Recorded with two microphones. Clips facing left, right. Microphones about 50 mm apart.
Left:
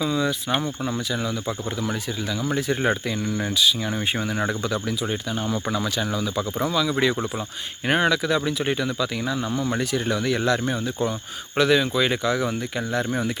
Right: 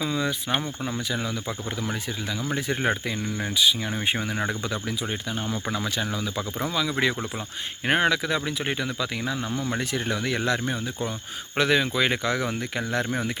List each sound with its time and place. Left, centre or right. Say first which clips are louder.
0.0 s speech: left 3 dB; right
0.5 s speech: left 3 dB; centre
1.1 s speech: left 3 dB; right
3.5 s speech: even; right
13.1 s speech: left 3 dB; right